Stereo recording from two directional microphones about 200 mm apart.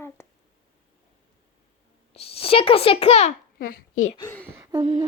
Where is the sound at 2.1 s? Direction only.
30° left (ahead or behind).